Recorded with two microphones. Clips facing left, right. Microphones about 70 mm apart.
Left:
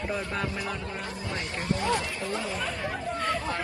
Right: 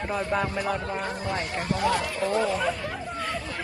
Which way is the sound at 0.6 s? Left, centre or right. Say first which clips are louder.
Right 6 dB; right.